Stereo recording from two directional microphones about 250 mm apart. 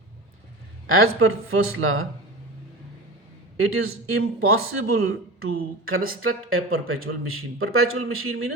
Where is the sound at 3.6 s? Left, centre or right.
Right.